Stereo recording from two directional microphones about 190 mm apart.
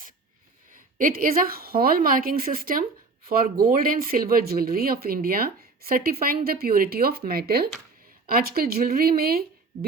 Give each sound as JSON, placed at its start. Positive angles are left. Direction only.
{"t": 0.9, "sound": "speech", "side_deg": -45}